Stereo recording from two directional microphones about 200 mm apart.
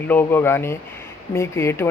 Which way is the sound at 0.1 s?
10° left (ahead or behind).